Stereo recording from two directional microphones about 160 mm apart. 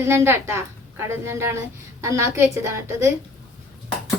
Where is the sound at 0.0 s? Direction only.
15° right (ahead or behind).